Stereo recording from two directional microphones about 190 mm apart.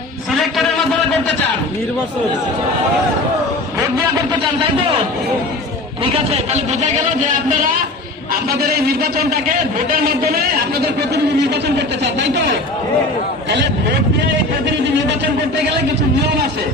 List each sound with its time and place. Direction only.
0.3 s a sound: centre (ahead or behind)
6.0 s a man's voice: 30° right (ahead or behind)
8.3 s a man's voice: 55° right (ahead or behind)